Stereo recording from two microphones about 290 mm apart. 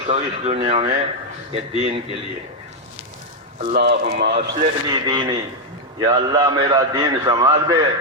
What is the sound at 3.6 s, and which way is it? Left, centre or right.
Speech, right.